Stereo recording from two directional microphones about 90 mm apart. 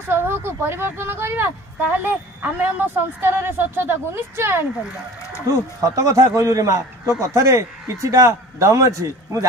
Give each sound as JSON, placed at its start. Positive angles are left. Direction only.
{"t": 0.1, "sound": "a man's voice", "side_deg": -25}